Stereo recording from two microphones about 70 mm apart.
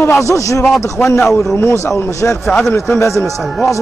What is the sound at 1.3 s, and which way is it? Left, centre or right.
Speech, left.